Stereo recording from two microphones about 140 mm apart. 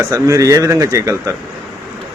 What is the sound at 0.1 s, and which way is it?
Speech, 25° right (ahead or behind).